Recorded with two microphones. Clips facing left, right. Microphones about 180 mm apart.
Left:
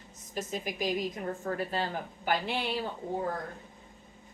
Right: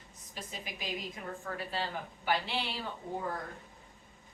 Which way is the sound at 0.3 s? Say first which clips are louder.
Left 10 dB; 45° left (ahead or behind).